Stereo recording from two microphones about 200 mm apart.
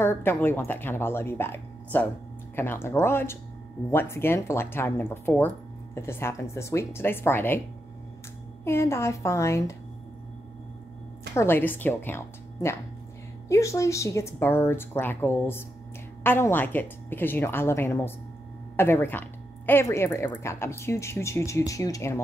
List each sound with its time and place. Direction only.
0.0 s a woman's voice: 10° left (ahead or behind)
8.6 s a woman's voice: 10° left (ahead or behind)
11.3 s a woman's voice: 10° left (ahead or behind)